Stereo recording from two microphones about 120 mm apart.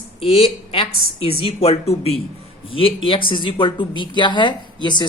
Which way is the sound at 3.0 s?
45° left (ahead or behind).